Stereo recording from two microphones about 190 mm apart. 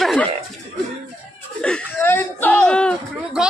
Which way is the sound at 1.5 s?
5° left (ahead or behind).